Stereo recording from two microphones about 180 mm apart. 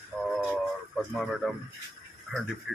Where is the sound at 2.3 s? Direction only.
Centre (ahead or behind).